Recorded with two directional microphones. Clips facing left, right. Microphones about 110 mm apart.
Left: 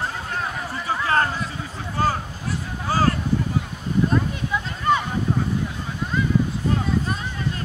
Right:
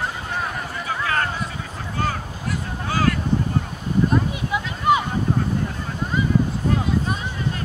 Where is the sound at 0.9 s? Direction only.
30° left (ahead or behind).